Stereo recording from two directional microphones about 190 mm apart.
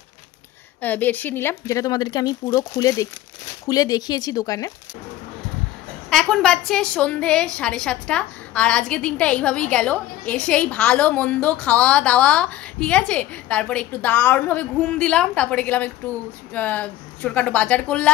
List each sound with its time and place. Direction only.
0.7 s a woman's voice: 10° left (ahead or behind)
6.0 s a woman's voice: centre (ahead or behind)